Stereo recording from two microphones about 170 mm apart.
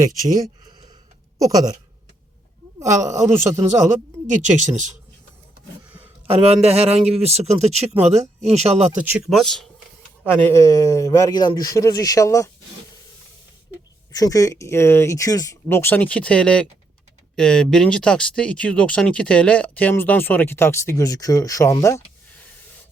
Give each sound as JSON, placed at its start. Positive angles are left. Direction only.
{"t": 1.4, "sound": "a sound", "side_deg": -20}
{"t": 3.1, "sound": "speech", "side_deg": -15}
{"t": 4.3, "sound": "speech", "side_deg": -45}
{"t": 6.2, "sound": "speech", "side_deg": -35}
{"t": 9.0, "sound": "speech", "side_deg": -5}
{"t": 10.2, "sound": "speech", "side_deg": 15}
{"t": 14.1, "sound": "speech", "side_deg": 20}